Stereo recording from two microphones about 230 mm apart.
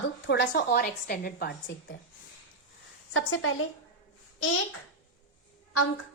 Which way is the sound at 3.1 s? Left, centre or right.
Left.